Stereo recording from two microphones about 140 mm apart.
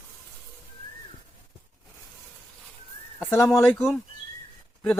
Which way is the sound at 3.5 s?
20° left (ahead or behind).